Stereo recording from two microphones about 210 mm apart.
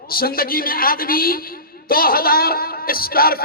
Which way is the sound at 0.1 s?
45° left (ahead or behind).